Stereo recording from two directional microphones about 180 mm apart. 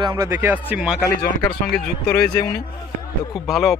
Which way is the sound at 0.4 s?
10° right (ahead or behind).